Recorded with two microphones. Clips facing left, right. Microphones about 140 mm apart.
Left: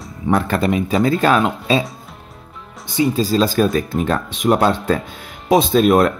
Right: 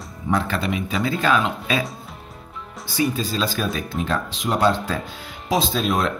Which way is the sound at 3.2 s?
45° left (ahead or behind).